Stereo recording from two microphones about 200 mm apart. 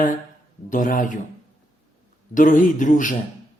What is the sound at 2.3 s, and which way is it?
Speech, 40° left (ahead or behind).